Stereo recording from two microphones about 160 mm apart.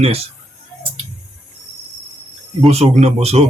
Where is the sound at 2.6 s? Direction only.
40° right (ahead or behind).